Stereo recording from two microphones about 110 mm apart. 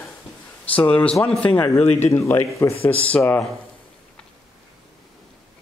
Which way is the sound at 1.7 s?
75° left (ahead or behind).